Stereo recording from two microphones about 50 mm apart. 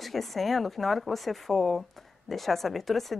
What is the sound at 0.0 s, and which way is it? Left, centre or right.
Speech, centre.